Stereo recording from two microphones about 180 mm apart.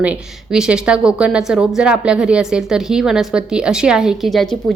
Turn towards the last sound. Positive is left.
turn(degrees=0)  # may be behind; listen again after turning